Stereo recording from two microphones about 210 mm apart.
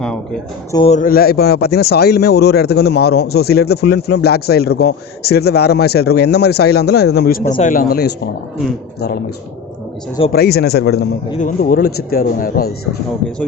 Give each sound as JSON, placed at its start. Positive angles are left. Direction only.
{"t": 0.9, "sound": "a man's voice", "side_deg": 40}
{"t": 10.3, "sound": "a man's voice", "side_deg": 50}